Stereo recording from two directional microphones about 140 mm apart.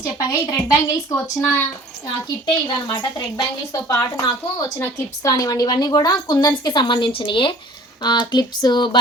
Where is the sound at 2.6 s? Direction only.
30° left (ahead or behind).